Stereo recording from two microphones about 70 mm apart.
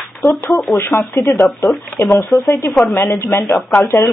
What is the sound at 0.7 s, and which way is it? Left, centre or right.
Speech, left.